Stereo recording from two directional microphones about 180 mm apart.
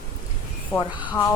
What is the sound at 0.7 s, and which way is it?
Speech, 15° left (ahead or behind).